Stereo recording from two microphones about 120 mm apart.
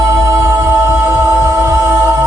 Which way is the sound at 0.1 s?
25° right (ahead or behind).